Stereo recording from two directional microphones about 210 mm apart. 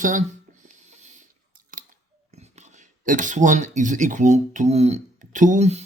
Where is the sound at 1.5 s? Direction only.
40° right (ahead or behind).